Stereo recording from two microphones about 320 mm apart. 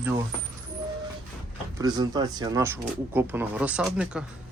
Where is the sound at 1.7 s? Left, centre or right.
Centre.